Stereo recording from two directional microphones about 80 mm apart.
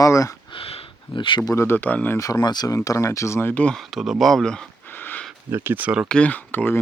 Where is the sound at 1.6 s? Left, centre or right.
Left.